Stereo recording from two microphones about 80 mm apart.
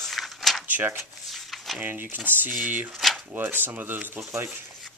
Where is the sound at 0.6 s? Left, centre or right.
Right.